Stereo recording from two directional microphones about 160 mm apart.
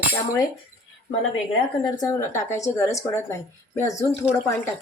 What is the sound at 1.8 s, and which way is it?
Speech, 20° left (ahead or behind).